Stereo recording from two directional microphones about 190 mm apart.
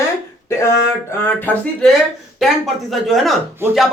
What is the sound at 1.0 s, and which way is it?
A woman's voice, 10° left (ahead or behind).